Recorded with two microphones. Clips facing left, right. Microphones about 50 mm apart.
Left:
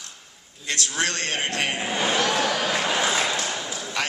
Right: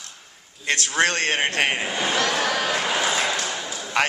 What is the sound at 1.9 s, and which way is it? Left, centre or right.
Speech, left.